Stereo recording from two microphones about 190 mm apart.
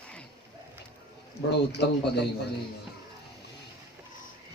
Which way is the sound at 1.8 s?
60° left (ahead or behind).